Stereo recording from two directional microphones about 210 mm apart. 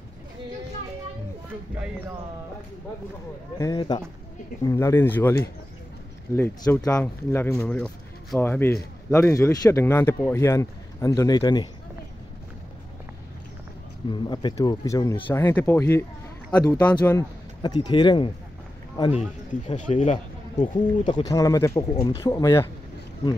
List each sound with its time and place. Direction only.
3.5 s speech: 20° left (ahead or behind)
6.3 s speech: 10° left (ahead or behind)
14.1 s speech: 20° left (ahead or behind)
19.7 s speech: 35° left (ahead or behind)
20.6 s speech: 25° left (ahead or behind)